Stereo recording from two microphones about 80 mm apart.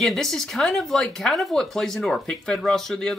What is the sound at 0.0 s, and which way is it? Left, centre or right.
Speech, centre.